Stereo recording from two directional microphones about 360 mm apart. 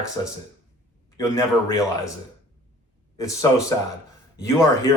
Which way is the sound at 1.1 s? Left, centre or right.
Centre.